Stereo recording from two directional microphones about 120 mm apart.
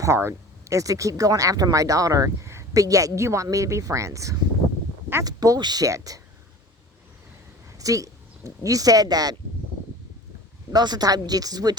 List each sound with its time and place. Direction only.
0.0 s speech: 20° right (ahead or behind)
7.8 s speech: 30° right (ahead or behind)
10.7 s speech: 35° right (ahead or behind)